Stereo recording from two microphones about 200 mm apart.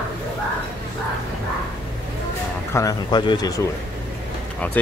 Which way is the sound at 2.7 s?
20° left (ahead or behind).